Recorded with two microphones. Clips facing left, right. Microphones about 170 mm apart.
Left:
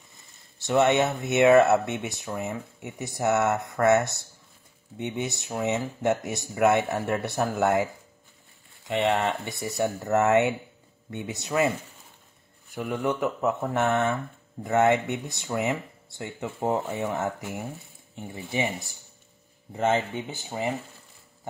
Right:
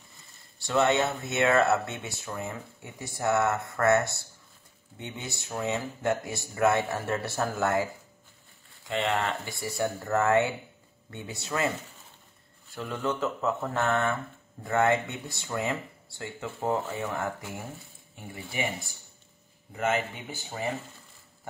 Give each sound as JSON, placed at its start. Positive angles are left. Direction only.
{"t": 0.6, "sound": "speech", "side_deg": 20}
{"t": 12.7, "sound": "speech", "side_deg": 15}
{"t": 19.7, "sound": "speech", "side_deg": 30}